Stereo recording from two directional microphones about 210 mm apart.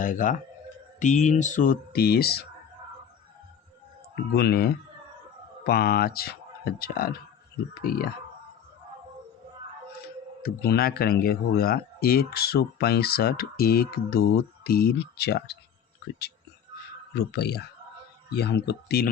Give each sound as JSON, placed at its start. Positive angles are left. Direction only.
{"t": 0.0, "sound": "speech", "side_deg": 40}
{"t": 4.1, "sound": "speech", "side_deg": 50}
{"t": 10.4, "sound": "speech", "side_deg": 50}
{"t": 17.2, "sound": "speech", "side_deg": 50}